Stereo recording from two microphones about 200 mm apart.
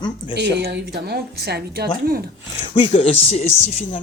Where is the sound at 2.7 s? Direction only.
25° left (ahead or behind).